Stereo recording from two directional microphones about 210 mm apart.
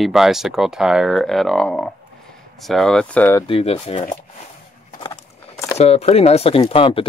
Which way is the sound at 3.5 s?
30° left (ahead or behind).